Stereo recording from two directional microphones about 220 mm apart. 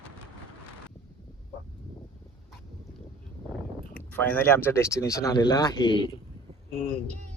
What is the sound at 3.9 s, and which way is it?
Speech, 10° left (ahead or behind).